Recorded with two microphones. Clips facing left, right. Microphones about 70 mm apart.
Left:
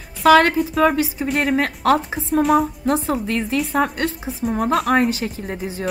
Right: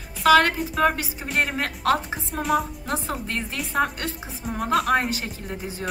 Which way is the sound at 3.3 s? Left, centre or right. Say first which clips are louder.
Left 8 dB; left.